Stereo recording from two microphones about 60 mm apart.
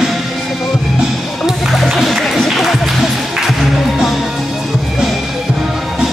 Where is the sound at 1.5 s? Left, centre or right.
Centre.